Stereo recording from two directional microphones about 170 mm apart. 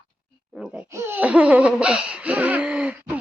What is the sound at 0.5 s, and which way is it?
Speech, 5° right (ahead or behind).